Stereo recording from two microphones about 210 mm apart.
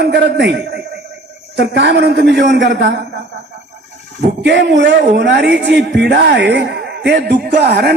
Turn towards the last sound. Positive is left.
turn(degrees=-50)  # may be behind; listen again after turning